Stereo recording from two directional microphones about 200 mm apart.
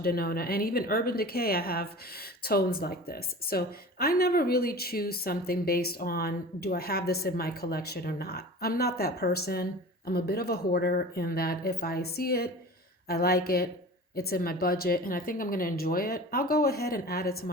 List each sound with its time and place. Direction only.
0.0 s a woman's voice: 50° left (ahead or behind)